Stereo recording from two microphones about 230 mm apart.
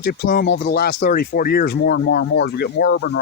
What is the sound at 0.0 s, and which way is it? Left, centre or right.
Speech, left.